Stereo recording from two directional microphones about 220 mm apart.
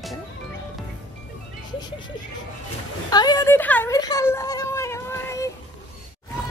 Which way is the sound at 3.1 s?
15° left (ahead or behind).